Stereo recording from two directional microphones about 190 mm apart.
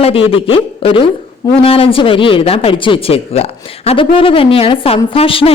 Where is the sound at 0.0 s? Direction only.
30° left (ahead or behind).